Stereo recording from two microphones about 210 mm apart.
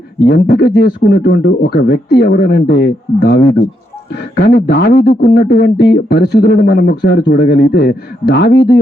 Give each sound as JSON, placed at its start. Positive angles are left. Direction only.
{"t": 0.3, "sound": "speech", "side_deg": 50}